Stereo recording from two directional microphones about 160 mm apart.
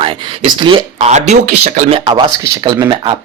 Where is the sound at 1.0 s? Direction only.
45° right (ahead or behind).